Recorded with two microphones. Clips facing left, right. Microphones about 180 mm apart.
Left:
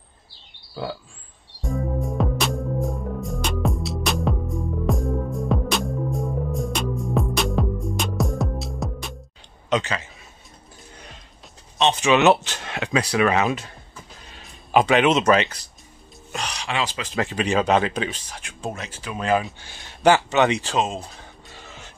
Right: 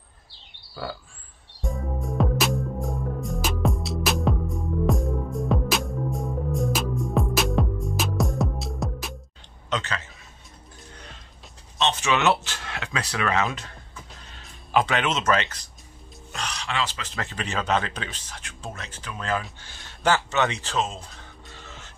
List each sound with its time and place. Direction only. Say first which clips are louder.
1.7 s music: left 5 dB; centre (ahead or behind)
9.7 s a man's voice: left 6 dB; 10° left (ahead or behind)
11.8 s speech: left 6 dB; 15° left (ahead or behind)
21.5 s music: left 1 dB; 15° left (ahead or behind)